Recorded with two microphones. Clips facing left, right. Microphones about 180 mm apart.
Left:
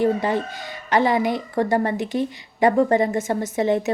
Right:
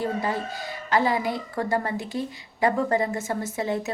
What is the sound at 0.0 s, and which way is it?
A woman's voice, 20° left (ahead or behind).